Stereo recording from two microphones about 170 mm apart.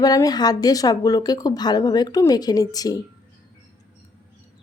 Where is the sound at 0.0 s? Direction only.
20° left (ahead or behind).